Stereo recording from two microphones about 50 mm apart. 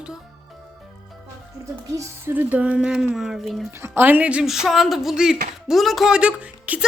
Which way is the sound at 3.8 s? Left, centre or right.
Right.